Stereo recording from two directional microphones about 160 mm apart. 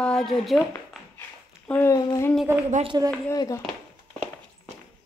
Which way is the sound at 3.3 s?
25° left (ahead or behind).